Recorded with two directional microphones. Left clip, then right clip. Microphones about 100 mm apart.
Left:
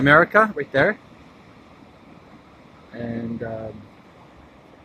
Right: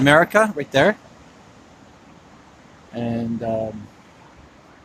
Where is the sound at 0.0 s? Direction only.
65° right (ahead or behind).